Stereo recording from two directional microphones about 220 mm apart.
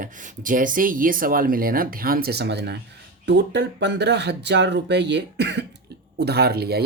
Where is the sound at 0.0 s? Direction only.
40° right (ahead or behind).